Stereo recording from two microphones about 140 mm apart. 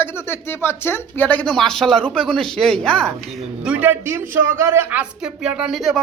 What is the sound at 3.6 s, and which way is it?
A man's voice, 15° right (ahead or behind).